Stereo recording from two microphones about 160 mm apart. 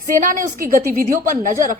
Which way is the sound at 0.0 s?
60° right (ahead or behind).